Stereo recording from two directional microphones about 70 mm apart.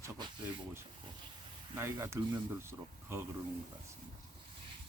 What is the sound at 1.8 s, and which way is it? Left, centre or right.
Speech, right.